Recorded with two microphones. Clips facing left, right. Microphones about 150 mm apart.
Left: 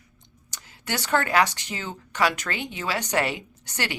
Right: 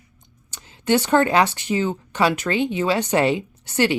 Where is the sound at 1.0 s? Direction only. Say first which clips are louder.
Right 3 dB; 20° right (ahead or behind).